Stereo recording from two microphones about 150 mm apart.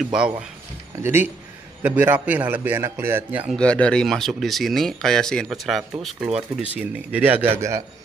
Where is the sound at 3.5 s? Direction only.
5° left (ahead or behind); by 7.8 s 20° right (ahead or behind).